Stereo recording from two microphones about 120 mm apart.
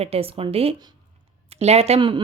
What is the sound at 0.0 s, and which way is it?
Speech, 55° right (ahead or behind).